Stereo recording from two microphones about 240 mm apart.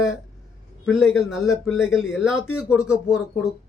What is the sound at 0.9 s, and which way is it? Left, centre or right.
Speech, centre.